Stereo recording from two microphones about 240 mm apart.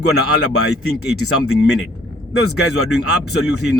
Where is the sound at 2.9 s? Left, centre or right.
Left.